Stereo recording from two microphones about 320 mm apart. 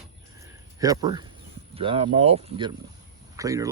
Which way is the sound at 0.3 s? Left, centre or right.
Centre.